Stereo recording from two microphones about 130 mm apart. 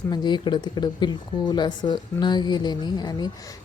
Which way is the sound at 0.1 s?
35° left (ahead or behind).